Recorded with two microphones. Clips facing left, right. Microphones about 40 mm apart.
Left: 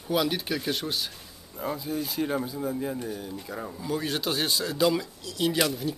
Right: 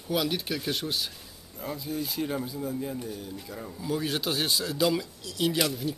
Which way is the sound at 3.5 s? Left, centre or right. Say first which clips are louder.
Left 4 dB; centre.